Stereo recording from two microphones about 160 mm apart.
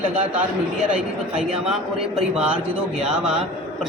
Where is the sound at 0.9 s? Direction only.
5° right (ahead or behind).